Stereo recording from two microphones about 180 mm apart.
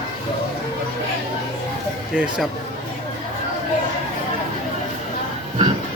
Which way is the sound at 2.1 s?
5° right (ahead or behind).